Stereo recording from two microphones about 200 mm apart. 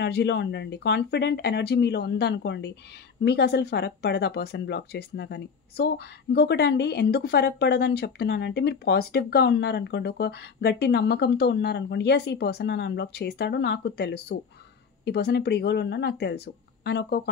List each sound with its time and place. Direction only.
0.0 s speech: 60° left (ahead or behind)